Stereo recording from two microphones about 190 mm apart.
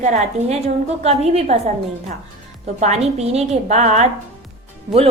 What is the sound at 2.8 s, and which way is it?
A woman's voice, 35° right (ahead or behind).